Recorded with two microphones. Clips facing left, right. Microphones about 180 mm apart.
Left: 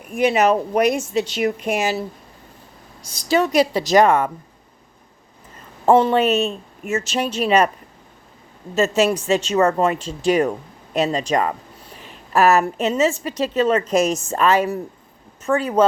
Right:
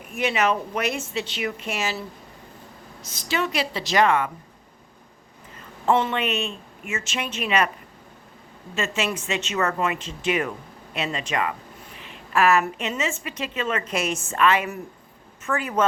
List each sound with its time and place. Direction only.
0.1 s a woman's voice: 40° left (ahead or behind)
3.2 s a woman's voice: 45° left (ahead or behind)
5.8 s a woman's voice: 40° left (ahead or behind)
8.7 s a woman's voice: 40° left (ahead or behind)